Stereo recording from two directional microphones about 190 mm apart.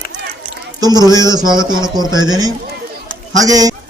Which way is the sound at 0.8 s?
20° right (ahead or behind).